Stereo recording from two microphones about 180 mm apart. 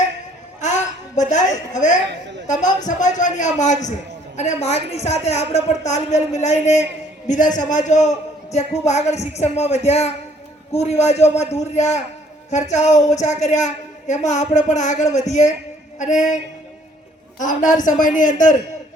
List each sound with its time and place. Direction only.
0.6 s a sound: 40° left (ahead or behind)
2.0 s a woman's voice: 80° right
2.5 s a man's voice: 45° left (ahead or behind)